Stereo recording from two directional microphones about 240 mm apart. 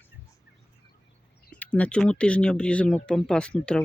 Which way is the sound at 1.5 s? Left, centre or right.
Centre.